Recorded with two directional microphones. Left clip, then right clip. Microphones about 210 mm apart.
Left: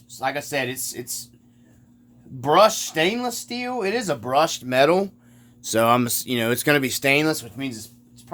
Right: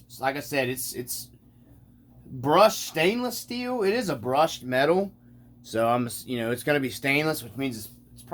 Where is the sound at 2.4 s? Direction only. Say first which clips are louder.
Left 3 dB; 25° left (ahead or behind); by 5.1 s 45° left (ahead or behind).